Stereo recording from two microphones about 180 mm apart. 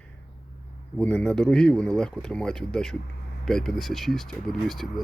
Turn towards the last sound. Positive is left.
turn(degrees=0)  # may be behind; listen again after turning